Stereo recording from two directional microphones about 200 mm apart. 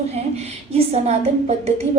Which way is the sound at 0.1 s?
30° right (ahead or behind).